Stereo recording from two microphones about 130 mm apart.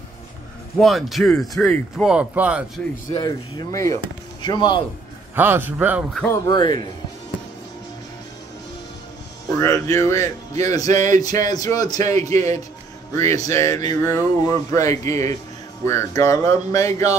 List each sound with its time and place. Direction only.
0.7 s speech: centre (ahead or behind)
2.0 s a man's voice: 10° right (ahead or behind)
3.1 s speech: 30° left (ahead or behind)
5.3 s a man's voice: 15° right (ahead or behind)
6.4 s speech: 35° left (ahead or behind)
9.6 s speech: 20° left (ahead or behind)
10.9 s speech: 70° right (ahead or behind)
11.1 s speech: 30° left (ahead or behind)